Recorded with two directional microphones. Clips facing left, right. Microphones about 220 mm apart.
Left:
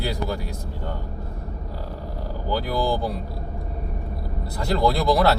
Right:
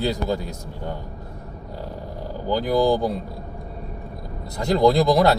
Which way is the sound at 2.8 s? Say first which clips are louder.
Right 6 dB; 20° right (ahead or behind).